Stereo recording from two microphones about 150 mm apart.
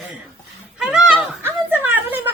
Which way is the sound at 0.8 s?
5° right (ahead or behind).